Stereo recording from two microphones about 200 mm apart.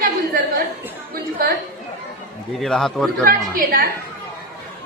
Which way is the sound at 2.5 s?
Centre (ahead or behind).